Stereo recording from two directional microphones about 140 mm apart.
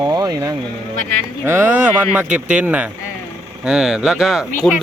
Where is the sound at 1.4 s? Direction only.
15° right (ahead or behind).